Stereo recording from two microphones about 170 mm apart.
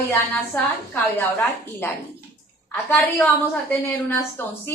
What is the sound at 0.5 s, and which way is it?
A woman's voice, 10° left (ahead or behind).